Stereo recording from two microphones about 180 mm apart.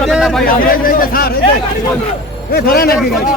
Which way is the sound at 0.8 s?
55° left (ahead or behind).